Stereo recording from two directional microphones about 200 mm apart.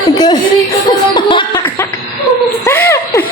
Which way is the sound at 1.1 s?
25° left (ahead or behind).